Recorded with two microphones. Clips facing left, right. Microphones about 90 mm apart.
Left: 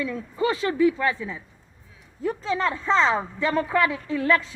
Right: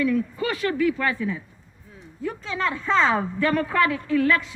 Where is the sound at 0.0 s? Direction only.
25° left (ahead or behind).